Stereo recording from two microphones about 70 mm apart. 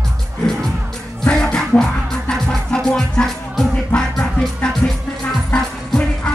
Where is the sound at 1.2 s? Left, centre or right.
Centre.